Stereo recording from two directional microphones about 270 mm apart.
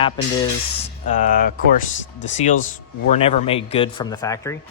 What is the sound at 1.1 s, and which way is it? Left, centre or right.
Speech, left.